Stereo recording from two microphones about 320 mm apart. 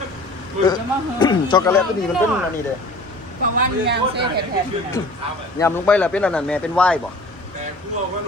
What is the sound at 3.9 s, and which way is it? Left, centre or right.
Speech, right.